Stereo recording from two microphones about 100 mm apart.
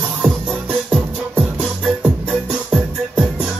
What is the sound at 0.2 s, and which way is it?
Music, centre (ahead or behind).